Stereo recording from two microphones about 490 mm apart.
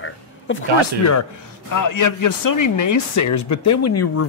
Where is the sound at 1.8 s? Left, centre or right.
Left.